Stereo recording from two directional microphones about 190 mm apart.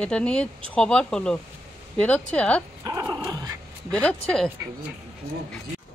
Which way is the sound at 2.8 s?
10° right (ahead or behind).